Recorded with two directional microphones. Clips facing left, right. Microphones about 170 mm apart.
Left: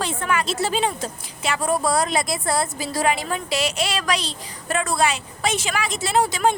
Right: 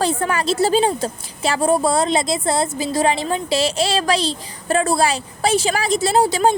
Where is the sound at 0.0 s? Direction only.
35° right (ahead or behind).